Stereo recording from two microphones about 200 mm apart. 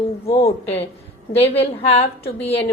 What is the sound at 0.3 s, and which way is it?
A woman's voice, 30° left (ahead or behind).